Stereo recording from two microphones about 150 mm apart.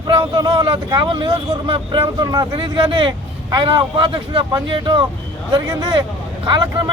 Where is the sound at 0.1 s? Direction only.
25° right (ahead or behind).